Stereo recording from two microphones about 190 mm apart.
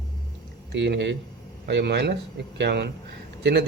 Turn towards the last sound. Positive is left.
turn(degrees=-60)  # may be behind; listen again after turning